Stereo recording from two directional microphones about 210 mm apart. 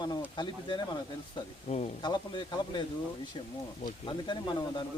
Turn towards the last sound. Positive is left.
turn(degrees=20)  # may be behind; listen again after turning